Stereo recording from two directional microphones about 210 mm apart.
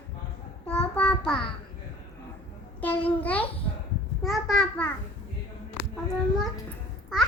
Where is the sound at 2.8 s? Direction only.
10° left (ahead or behind).